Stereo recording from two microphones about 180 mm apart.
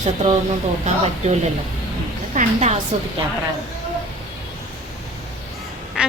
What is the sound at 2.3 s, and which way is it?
Speech, 40° right (ahead or behind).